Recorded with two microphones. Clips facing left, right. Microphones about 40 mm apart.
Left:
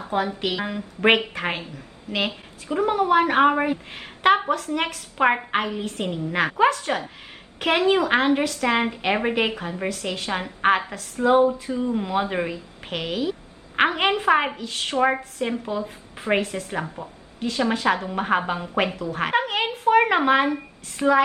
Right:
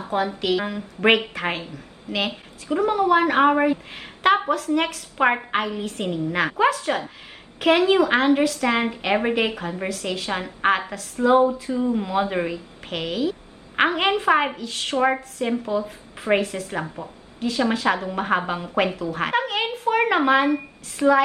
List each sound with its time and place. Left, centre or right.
0.1 s a woman's voice: centre
11.3 s a sound: left
11.8 s a woman's voice: centre